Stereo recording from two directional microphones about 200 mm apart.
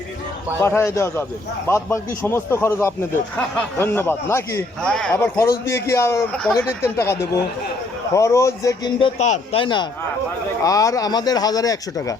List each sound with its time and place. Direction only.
0.6 s a man's voice: 15° left (ahead or behind)